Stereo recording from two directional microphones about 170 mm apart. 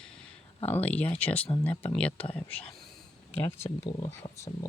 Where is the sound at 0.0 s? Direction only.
5° left (ahead or behind).